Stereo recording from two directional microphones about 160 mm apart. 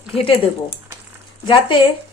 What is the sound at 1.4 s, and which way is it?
Speech, 30° left (ahead or behind).